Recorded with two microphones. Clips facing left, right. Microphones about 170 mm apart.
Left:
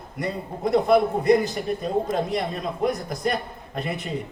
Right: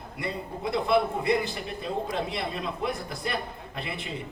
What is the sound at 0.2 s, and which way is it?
A man's voice, 45° left (ahead or behind).